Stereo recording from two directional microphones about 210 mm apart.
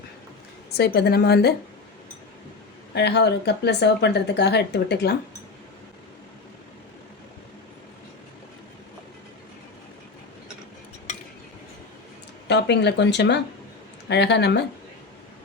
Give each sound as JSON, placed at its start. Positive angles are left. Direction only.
{"t": 0.7, "sound": "speech", "side_deg": 50}
{"t": 2.9, "sound": "speech", "side_deg": 50}
{"t": 12.5, "sound": "speech", "side_deg": 55}